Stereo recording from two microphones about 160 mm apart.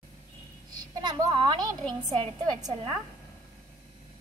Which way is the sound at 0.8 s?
25° right (ahead or behind).